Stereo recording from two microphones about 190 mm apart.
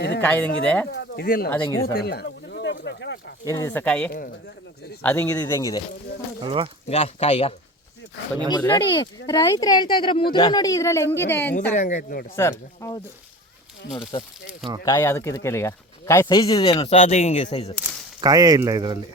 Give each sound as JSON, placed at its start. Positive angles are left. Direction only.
{"t": 0.2, "sound": "speech", "side_deg": 5}
{"t": 0.9, "sound": "speech", "side_deg": 55}
{"t": 1.9, "sound": "a sound", "side_deg": 55}
{"t": 3.4, "sound": "speech", "side_deg": 15}
{"t": 6.4, "sound": "speech", "side_deg": -25}
{"t": 6.8, "sound": "speech", "side_deg": 35}
{"t": 8.5, "sound": "speech", "side_deg": 20}
{"t": 11.7, "sound": "speech", "side_deg": 40}
{"t": 11.9, "sound": "speech", "side_deg": 50}
{"t": 12.4, "sound": "speech", "side_deg": 15}
{"t": 14.1, "sound": "speech", "side_deg": 25}
{"t": 14.8, "sound": "speech", "side_deg": 15}
{"t": 18.2, "sound": "speech", "side_deg": -20}